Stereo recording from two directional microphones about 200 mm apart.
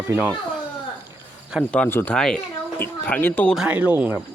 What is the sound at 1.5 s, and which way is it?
Speech, 5° right (ahead or behind).